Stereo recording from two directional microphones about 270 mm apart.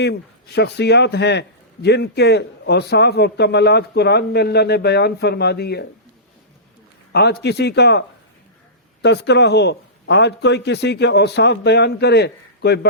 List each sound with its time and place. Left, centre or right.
0.0 s a man's voice: left
7.1 s a man's voice: left